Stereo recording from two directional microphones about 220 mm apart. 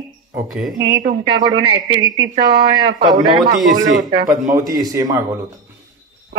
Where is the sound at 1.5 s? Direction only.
50° right (ahead or behind).